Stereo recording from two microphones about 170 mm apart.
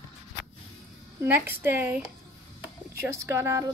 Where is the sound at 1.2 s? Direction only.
15° right (ahead or behind).